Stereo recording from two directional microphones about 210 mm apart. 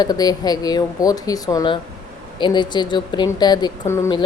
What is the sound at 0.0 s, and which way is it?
A woman's voice, 20° left (ahead or behind).